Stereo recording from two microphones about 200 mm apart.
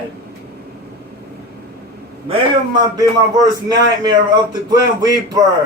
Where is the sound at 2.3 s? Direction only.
20° right (ahead or behind).